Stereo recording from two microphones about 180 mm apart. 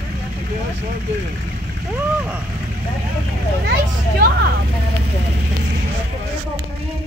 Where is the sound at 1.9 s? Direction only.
10° right (ahead or behind).